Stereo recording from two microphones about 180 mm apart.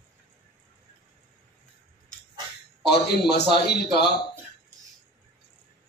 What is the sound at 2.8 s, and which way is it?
A man's voice, 65° left (ahead or behind).